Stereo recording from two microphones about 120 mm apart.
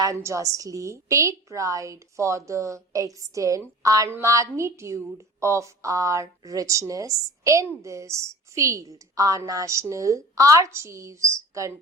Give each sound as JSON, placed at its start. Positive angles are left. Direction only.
{"t": 0.0, "sound": "a woman's voice", "side_deg": -25}